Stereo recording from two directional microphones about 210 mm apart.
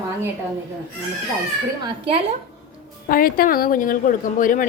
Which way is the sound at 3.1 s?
45° left (ahead or behind).